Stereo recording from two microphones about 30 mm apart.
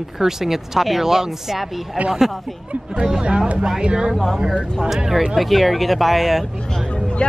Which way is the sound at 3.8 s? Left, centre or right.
Right.